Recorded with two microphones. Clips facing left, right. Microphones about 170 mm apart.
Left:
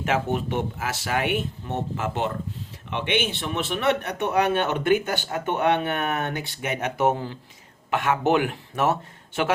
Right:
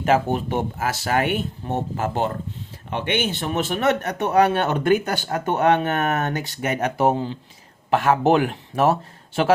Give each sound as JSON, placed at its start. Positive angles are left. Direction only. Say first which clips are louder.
{"t": 0.0, "sound": "a man's voice", "louder": "right 5 dB", "side_deg": -35}